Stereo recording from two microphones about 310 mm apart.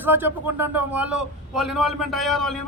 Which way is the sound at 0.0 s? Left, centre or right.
Centre.